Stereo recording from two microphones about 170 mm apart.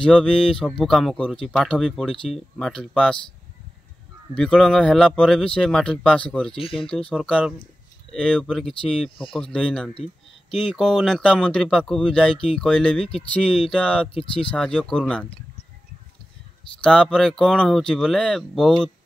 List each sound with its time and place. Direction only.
0.0 s speech: 5° left (ahead or behind)
4.4 s speech: 5° left (ahead or behind)
6.5 s speech: 30° left (ahead or behind)
7.1 s speech: 5° left (ahead or behind)
14.1 s speech: 30° left (ahead or behind)
14.5 s speech: 5° left (ahead or behind)
15.2 s a sound: 30° left (ahead or behind)
16.8 s speech: 5° left (ahead or behind)